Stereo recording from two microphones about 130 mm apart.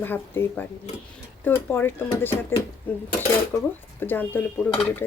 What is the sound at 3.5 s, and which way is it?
Speech, 25° left (ahead or behind).